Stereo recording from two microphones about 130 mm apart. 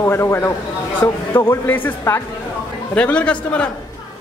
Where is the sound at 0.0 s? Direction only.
20° left (ahead or behind).